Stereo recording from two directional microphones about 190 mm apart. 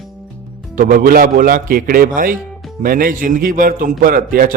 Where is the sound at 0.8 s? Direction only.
45° right (ahead or behind).